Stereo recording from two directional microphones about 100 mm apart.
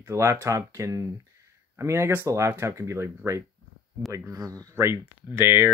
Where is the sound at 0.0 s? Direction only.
25° right (ahead or behind).